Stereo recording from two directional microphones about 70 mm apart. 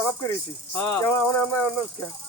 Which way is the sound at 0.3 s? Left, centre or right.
Left.